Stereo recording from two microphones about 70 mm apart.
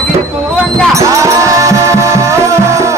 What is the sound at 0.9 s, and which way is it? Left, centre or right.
Music, right.